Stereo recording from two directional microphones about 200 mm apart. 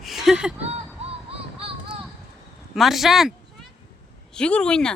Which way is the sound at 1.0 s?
30° right (ahead or behind).